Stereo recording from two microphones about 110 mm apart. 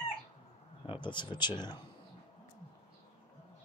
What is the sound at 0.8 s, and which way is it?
Speech, 50° left (ahead or behind).